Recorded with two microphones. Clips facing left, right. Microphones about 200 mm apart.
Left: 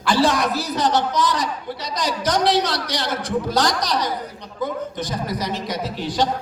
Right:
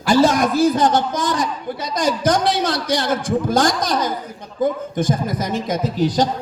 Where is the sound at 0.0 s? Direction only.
45° right (ahead or behind).